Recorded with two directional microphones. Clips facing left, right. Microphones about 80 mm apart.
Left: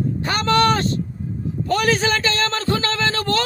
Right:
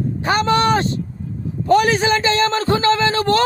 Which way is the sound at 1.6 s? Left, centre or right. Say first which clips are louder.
Right 5 dB; right.